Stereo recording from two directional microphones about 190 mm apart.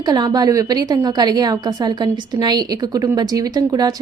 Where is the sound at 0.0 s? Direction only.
20° right (ahead or behind).